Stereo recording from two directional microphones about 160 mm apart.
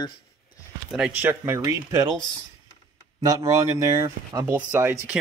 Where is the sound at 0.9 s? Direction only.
10° right (ahead or behind).